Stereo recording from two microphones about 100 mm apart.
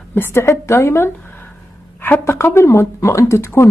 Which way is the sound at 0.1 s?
25° left (ahead or behind).